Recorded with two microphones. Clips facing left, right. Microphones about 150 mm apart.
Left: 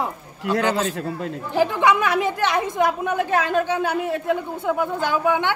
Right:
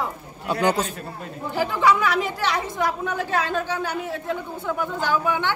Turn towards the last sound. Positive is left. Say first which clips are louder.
# left 2 dB
turn(degrees=20)  # may be behind; listen again after turning